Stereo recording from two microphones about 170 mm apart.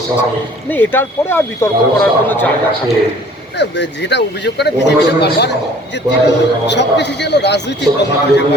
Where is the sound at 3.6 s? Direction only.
90° left.